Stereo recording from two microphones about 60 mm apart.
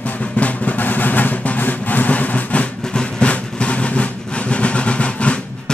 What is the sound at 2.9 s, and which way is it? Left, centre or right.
Train, centre.